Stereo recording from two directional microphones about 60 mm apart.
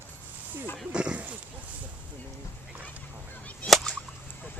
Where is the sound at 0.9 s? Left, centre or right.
Centre.